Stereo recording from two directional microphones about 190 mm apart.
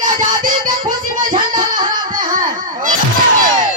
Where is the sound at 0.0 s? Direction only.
45° right (ahead or behind).